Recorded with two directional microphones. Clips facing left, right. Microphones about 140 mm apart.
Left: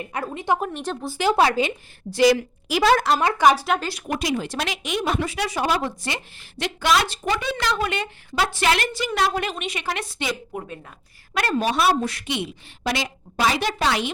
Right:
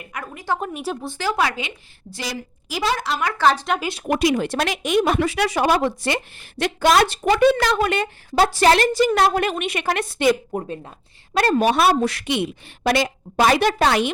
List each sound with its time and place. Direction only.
0.0 s a woman's voice: 30° left (ahead or behind)
0.6 s speech: 10° right (ahead or behind)
1.2 s a woman's voice: 30° left (ahead or behind)
2.0 s a woman's voice: 70° left (ahead or behind)
3.3 s speech: 10° left (ahead or behind)
4.1 s a woman's voice: 65° right (ahead or behind); by 12.3 s 80° right
12.3 s a woman's voice: 55° right (ahead or behind)